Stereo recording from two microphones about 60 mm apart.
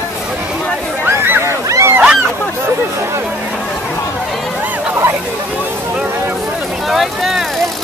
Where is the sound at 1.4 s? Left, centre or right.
Right.